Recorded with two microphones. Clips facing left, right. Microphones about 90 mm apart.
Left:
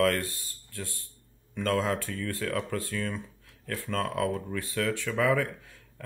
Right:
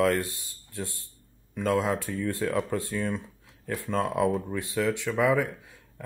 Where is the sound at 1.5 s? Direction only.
10° right (ahead or behind).